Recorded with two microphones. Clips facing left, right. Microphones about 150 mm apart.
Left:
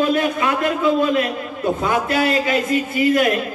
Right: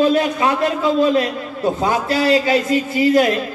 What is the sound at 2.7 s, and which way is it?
Speech, 35° right (ahead or behind).